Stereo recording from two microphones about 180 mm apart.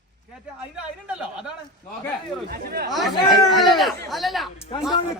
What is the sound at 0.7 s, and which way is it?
Speech, 5° right (ahead or behind).